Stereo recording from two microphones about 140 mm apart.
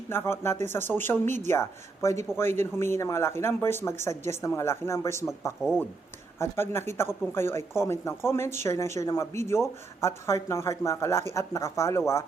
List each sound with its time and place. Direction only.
0.1 s speech: 15° left (ahead or behind)